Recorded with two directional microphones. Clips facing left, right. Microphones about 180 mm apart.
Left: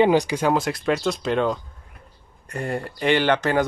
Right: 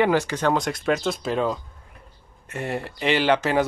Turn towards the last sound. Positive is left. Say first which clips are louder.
# left 1 dB
turn(degrees=-5)  # may be behind; listen again after turning